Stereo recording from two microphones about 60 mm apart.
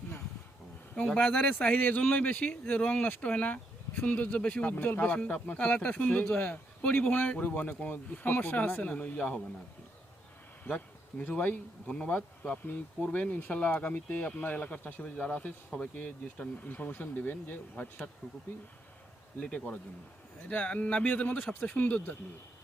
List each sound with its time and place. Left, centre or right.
1.1 s speech: left
10.6 s speech: left
19.4 s speech: left